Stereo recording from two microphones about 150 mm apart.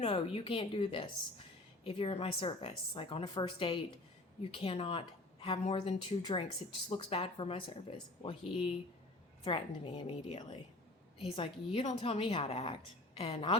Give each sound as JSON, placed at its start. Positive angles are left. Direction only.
{"t": 0.0, "sound": "a woman's voice", "side_deg": 40}